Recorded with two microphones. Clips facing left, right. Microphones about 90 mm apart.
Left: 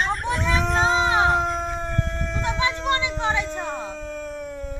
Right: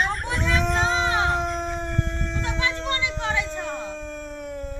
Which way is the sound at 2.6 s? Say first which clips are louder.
Left 1 dB; 15° left (ahead or behind).